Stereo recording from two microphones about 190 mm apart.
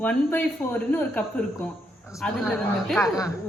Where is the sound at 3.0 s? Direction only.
15° left (ahead or behind).